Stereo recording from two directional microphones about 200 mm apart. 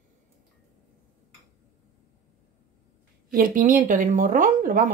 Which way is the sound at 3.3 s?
45° right (ahead or behind).